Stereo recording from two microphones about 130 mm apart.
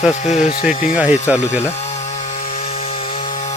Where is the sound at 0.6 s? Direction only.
10° right (ahead or behind).